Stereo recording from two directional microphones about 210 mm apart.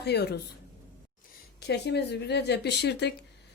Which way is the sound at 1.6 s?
55° left (ahead or behind).